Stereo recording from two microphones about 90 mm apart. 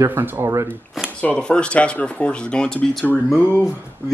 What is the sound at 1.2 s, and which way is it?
Speech, 15° left (ahead or behind).